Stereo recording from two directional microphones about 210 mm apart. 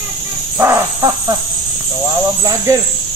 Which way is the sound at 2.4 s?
15° right (ahead or behind).